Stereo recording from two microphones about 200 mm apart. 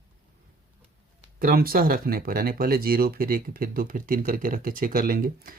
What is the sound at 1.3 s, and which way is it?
Speech, 45° right (ahead or behind).